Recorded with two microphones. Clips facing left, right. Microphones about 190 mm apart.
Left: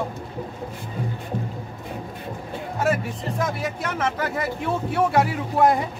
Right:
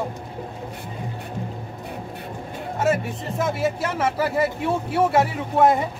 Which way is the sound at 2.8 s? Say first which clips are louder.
Right 1 dB; centre (ahead or behind).